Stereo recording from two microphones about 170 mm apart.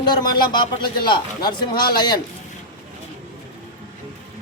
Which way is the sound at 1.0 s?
25° left (ahead or behind).